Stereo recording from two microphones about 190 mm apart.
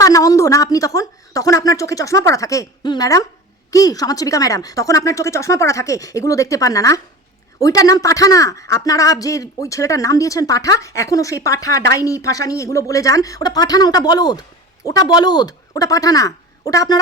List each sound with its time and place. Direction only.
0.0 s speech: 20° left (ahead or behind)